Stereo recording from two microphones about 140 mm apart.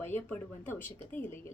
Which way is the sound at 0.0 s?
15° left (ahead or behind).